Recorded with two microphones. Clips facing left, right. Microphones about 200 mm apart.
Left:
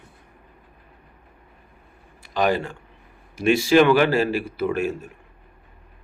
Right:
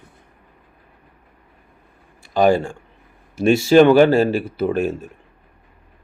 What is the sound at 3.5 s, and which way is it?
Speech, 30° right (ahead or behind).